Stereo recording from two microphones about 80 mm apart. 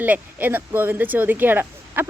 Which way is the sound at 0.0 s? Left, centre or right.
Right.